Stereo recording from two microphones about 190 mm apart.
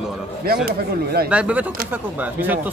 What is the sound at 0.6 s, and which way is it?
Speech, 55° right (ahead or behind).